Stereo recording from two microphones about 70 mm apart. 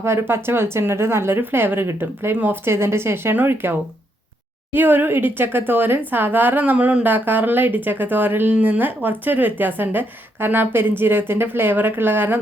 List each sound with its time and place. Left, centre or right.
0.0 s a woman's voice: right